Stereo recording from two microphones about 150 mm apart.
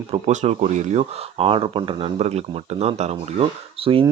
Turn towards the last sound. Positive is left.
turn(degrees=-40)  # may be behind; listen again after turning